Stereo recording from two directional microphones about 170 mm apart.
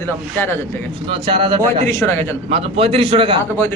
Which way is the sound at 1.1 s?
30° right (ahead or behind).